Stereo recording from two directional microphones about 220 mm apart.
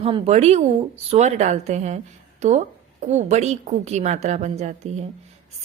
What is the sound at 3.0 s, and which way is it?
A woman's voice, 30° right (ahead or behind).